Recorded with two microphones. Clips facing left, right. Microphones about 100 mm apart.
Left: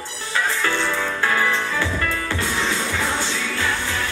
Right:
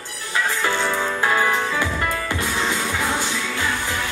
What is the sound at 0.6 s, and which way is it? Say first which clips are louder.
Music: right 1 dB; 15° right (ahead or behind).